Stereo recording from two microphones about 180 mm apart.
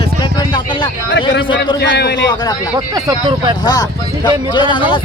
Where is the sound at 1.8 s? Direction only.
65° left (ahead or behind).